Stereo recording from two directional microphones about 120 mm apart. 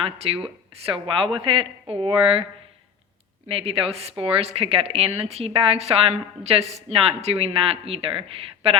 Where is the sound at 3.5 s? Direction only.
55° right (ahead or behind).